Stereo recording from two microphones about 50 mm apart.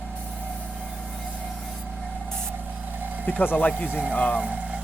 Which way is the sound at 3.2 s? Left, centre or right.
Left.